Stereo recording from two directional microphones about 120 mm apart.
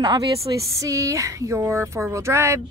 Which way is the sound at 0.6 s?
25° right (ahead or behind).